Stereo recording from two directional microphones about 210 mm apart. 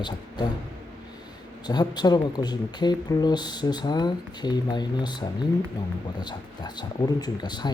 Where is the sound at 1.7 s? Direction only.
20° left (ahead or behind).